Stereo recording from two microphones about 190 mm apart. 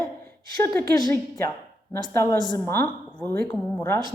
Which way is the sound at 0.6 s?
10° left (ahead or behind).